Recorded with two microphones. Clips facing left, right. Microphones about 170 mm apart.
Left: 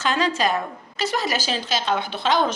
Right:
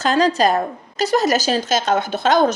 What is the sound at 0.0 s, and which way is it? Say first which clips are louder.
A woman's voice: right 6 dB; 40° right (ahead or behind).